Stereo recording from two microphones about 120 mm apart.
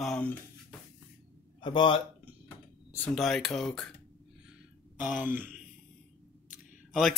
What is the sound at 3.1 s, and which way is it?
Speech, centre (ahead or behind).